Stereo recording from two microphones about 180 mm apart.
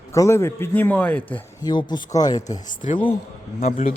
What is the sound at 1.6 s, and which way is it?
A man's voice, 25° left (ahead or behind).